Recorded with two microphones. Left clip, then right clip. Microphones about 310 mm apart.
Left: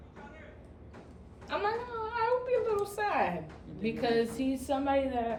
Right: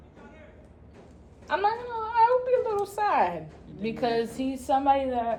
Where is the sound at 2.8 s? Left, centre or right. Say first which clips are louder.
Right 6 dB; right.